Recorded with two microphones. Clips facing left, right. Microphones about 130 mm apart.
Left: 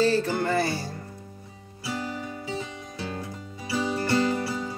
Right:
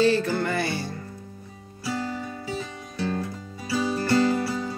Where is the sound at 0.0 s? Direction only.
35° left (ahead or behind).